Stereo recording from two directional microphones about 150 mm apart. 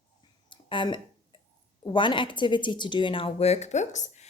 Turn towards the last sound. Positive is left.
turn(degrees=50)  # may be behind; listen again after turning